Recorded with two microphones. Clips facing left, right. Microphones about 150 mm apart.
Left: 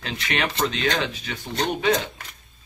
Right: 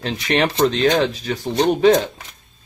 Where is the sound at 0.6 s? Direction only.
35° right (ahead or behind).